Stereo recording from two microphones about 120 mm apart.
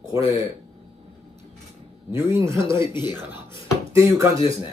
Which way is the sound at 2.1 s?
20° right (ahead or behind).